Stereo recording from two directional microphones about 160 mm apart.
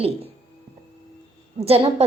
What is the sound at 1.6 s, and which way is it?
Speech, 40° right (ahead or behind).